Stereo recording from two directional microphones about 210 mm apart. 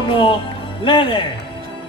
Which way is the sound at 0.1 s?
25° left (ahead or behind).